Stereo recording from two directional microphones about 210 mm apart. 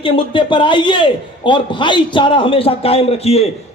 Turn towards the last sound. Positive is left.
turn(degrees=30)  # may be behind; listen again after turning